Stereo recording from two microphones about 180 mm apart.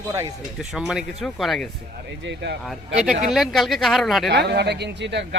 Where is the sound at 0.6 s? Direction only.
Centre (ahead or behind).